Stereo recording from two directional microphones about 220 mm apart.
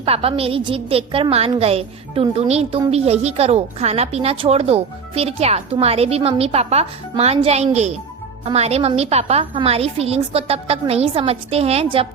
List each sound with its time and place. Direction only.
0.0 s a woman's voice: 25° right (ahead or behind)